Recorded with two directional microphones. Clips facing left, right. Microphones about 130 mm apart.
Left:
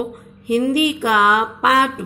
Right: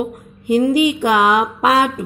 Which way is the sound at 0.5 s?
20° right (ahead or behind).